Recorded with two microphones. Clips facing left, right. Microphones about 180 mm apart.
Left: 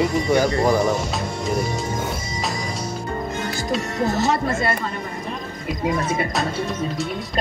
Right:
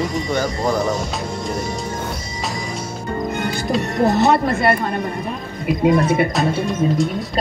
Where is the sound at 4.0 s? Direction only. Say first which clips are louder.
Right 6 dB; 60° right (ahead or behind).